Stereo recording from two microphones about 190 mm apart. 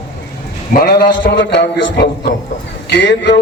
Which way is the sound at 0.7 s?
55° left (ahead or behind).